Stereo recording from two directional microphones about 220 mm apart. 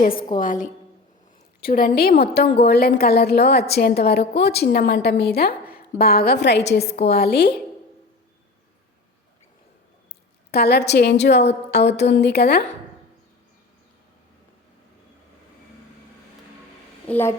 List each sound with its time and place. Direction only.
0.0 s a woman's voice: 40° left (ahead or behind)
6.8 s a woman's voice: 30° left (ahead or behind)
7.1 s a woman's voice: 45° left (ahead or behind)
10.5 s a woman's voice: 45° left (ahead or behind)
17.1 s a woman's voice: 10° left (ahead or behind)